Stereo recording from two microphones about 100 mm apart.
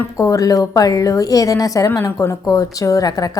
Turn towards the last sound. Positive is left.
turn(degrees=40)  # may be behind; listen again after turning